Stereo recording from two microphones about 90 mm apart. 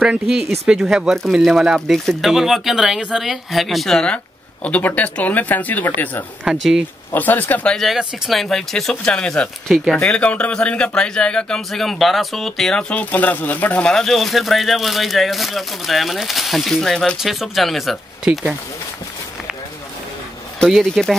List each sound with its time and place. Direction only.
0.3 s speech: 5° right (ahead or behind)
4.6 s speech: 20° left (ahead or behind)
6.4 s speech: 5° right (ahead or behind)
7.1 s speech: 20° left (ahead or behind)
7.7 s speech: centre (ahead or behind)
12.9 s speech: 15° left (ahead or behind)
13.9 s speech: centre (ahead or behind)
20.7 s speech: centre (ahead or behind)